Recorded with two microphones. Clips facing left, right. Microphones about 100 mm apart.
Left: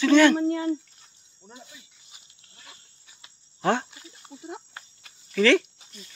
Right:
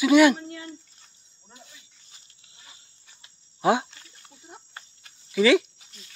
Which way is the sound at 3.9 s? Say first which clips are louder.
Left 4 dB; 15° left (ahead or behind).